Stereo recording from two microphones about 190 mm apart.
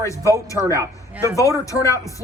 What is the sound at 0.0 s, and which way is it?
Speech, 15° left (ahead or behind).